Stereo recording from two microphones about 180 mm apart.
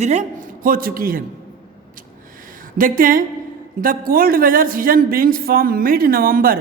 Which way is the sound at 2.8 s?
50° right (ahead or behind).